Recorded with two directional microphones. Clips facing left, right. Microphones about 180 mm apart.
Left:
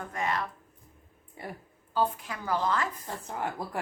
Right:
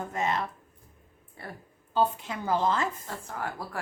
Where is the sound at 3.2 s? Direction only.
20° left (ahead or behind).